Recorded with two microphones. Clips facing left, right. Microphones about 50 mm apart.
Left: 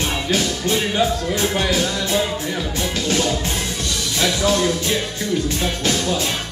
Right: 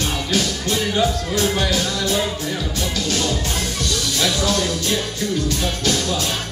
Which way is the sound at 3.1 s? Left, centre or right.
Left.